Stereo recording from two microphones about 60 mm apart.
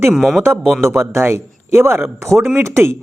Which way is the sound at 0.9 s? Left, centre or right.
Right.